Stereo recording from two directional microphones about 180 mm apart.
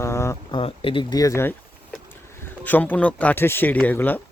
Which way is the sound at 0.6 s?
30° left (ahead or behind).